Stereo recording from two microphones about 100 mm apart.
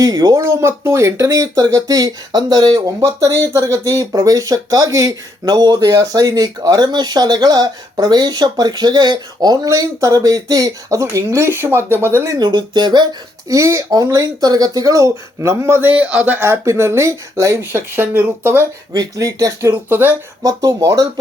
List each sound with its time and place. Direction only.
0.0 s speech: 40° right (ahead or behind)
3.0 s speech: 30° right (ahead or behind)
12.4 s speech: 45° right (ahead or behind)
13.5 s speech: 30° right (ahead or behind)
17.6 s speech: 20° right (ahead or behind)
18.9 s speech: 35° right (ahead or behind)
19.9 s speech: 20° right (ahead or behind)
20.4 s speech: 35° right (ahead or behind)